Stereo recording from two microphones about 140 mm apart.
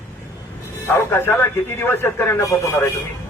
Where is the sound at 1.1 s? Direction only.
15° left (ahead or behind).